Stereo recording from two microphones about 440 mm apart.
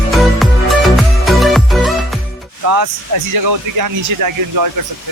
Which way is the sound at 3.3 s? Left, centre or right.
Right.